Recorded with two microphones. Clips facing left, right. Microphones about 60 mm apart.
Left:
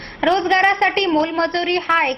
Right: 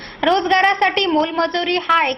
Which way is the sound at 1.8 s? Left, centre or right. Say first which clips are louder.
Right 3 dB; left.